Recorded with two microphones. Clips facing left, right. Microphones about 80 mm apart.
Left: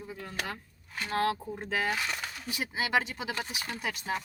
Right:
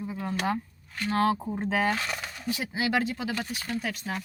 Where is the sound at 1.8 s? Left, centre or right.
Centre.